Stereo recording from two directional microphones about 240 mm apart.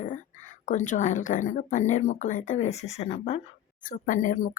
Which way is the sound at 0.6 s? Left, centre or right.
Left.